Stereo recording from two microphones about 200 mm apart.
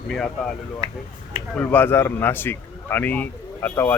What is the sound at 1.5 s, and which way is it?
A man's voice, 10° left (ahead or behind).